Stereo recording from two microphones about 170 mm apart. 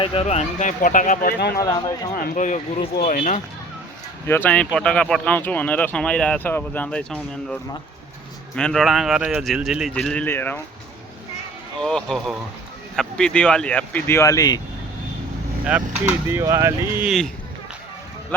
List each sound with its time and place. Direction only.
0.0 s speech: 35° left (ahead or behind); by 1.4 s 50° left (ahead or behind)
1.5 s speech: 20° left (ahead or behind)
2.1 s speech: 50° left (ahead or behind)
4.3 s speech: 10° left (ahead or behind)
11.8 s speech: 5° left (ahead or behind); by 14.6 s 20° left (ahead or behind)
16.3 s speech: 15° right (ahead or behind)